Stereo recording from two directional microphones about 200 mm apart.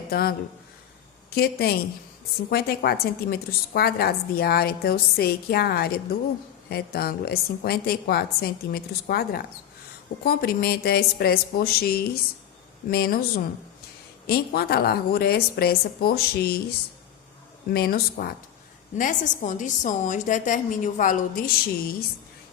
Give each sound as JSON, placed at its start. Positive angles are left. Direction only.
{"t": 0.1, "sound": "a woman's voice", "side_deg": 50}
{"t": 17.7, "sound": "a woman's voice", "side_deg": 50}